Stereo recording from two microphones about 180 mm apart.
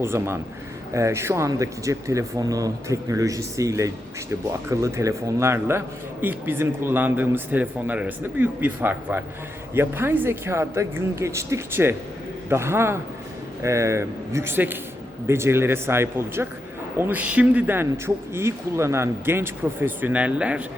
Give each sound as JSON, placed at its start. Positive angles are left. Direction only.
{"t": 0.0, "sound": "speech", "side_deg": -15}